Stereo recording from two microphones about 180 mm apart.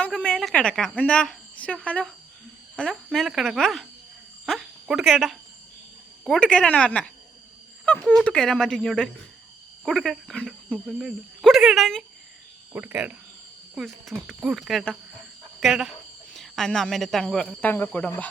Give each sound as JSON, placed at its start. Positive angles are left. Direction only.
{"t": 0.0, "sound": "speech", "side_deg": 5}
{"t": 12.7, "sound": "speech", "side_deg": -10}